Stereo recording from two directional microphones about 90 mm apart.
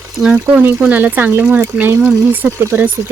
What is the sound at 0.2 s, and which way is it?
Speech, 10° right (ahead or behind).